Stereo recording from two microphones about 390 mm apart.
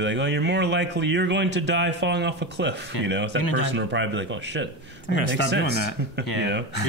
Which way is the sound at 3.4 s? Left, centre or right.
Left.